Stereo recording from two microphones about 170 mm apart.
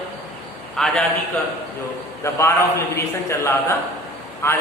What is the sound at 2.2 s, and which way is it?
A man's voice, 15° left (ahead or behind).